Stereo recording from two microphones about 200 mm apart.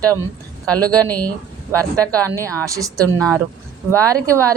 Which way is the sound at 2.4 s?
15° right (ahead or behind).